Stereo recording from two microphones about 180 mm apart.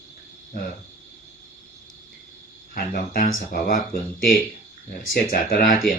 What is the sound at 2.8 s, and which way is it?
Speech, 55° left (ahead or behind).